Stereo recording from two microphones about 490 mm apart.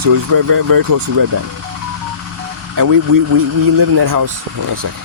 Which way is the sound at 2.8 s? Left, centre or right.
Right.